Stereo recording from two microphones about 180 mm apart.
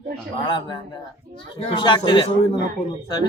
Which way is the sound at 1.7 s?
25° left (ahead or behind).